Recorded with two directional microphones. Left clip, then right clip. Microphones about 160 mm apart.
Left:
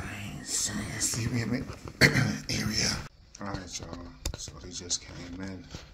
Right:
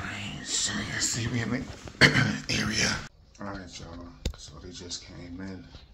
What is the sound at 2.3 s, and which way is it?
Beatboxing, centre (ahead or behind).